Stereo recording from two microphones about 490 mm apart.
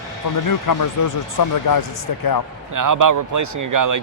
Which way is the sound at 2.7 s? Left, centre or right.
Right.